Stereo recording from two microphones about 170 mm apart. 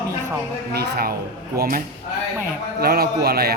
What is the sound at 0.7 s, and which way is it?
Speech, 65° right (ahead or behind).